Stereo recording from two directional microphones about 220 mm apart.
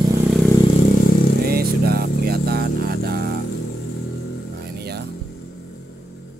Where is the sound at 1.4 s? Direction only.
45° right (ahead or behind).